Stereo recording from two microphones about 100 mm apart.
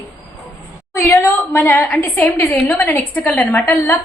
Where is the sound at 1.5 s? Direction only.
20° left (ahead or behind).